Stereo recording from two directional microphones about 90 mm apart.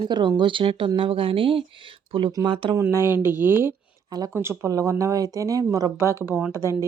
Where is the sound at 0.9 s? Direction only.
85° right; by 2.7 s 65° right (ahead or behind).